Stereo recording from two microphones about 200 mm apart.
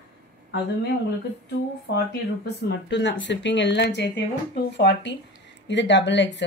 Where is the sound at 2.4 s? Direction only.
60° left (ahead or behind).